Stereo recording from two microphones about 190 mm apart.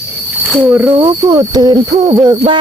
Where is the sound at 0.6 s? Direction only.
10° right (ahead or behind).